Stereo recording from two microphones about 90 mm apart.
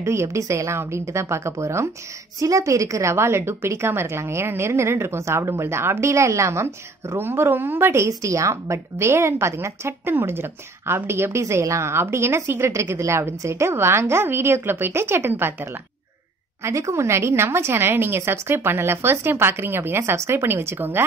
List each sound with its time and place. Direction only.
0.0 s a woman's voice: 30° right (ahead or behind)